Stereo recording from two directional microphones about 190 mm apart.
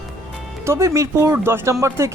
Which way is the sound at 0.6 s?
15° right (ahead or behind).